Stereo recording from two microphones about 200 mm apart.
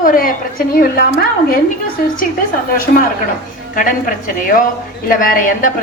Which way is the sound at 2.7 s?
45° left (ahead or behind).